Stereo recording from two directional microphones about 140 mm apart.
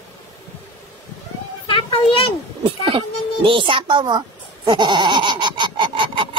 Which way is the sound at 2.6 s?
40° right (ahead or behind).